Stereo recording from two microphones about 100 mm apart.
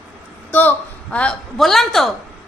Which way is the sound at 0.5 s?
20° left (ahead or behind).